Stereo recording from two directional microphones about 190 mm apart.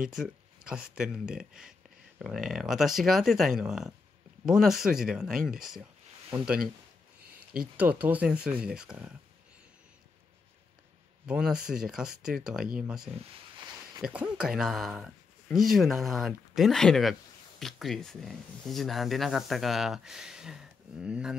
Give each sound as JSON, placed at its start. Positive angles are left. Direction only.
{"t": 0.1, "sound": "speech", "side_deg": -5}
{"t": 7.7, "sound": "speech", "side_deg": -10}
{"t": 11.2, "sound": "speech", "side_deg": -5}
{"t": 13.1, "sound": "a sound", "side_deg": -20}
{"t": 14.0, "sound": "speech", "side_deg": -5}